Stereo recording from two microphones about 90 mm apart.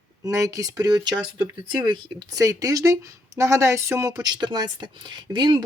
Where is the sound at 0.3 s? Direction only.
40° right (ahead or behind).